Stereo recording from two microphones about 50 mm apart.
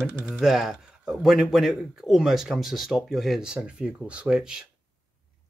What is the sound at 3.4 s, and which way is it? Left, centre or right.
Speech, centre.